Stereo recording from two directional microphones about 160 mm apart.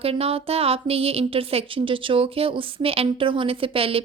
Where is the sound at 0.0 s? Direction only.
35° right (ahead or behind).